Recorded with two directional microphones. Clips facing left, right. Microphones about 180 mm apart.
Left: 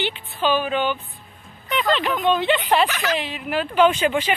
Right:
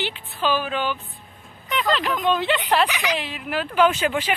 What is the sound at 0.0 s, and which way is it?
Speech, centre (ahead or behind).